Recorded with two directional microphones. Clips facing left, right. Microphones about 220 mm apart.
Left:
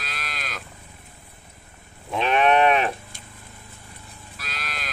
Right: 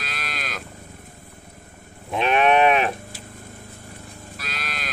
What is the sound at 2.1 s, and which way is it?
Sheep, 10° right (ahead or behind).